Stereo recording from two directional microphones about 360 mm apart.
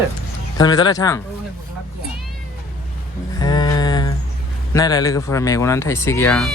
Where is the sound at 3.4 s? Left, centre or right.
Centre.